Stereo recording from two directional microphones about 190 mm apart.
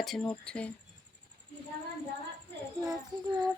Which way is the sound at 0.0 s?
Centre (ahead or behind).